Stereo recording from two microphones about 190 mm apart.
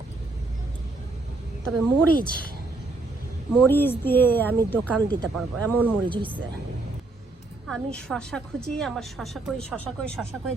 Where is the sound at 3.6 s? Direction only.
10° left (ahead or behind).